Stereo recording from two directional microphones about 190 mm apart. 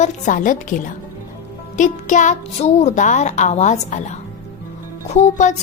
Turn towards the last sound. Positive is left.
turn(degrees=40)  # may be behind; listen again after turning